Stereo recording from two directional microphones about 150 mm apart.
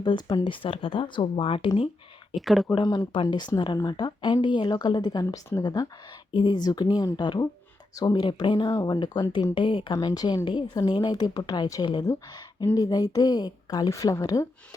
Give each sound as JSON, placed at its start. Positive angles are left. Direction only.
{"t": 0.0, "sound": "speech", "side_deg": 30}
{"t": 2.3, "sound": "speech", "side_deg": 0}
{"t": 2.7, "sound": "speech", "side_deg": 30}
{"t": 5.2, "sound": "speech", "side_deg": 20}